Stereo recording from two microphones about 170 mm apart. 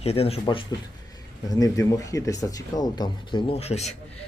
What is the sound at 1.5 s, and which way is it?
Speech, 20° left (ahead or behind).